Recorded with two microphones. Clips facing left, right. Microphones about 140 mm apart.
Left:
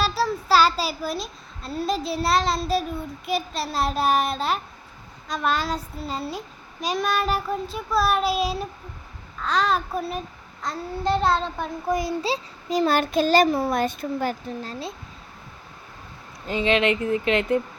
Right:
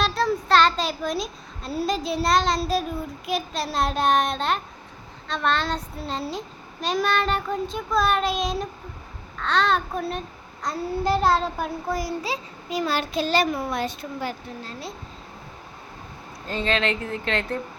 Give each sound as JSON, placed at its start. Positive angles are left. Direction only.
{"t": 0.0, "sound": "a child's voice", "side_deg": 5}
{"t": 11.9, "sound": "a child's voice", "side_deg": 25}
{"t": 13.7, "sound": "speech", "side_deg": 50}
{"t": 16.5, "sound": "speech", "side_deg": 15}